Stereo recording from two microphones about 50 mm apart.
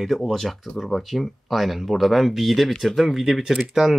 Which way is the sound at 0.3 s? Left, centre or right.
Centre.